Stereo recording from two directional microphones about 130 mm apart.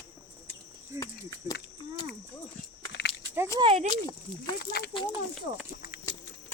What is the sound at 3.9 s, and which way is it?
Speech, 35° left (ahead or behind).